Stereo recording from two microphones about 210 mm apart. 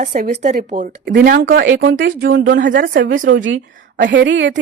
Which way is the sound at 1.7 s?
65° right (ahead or behind).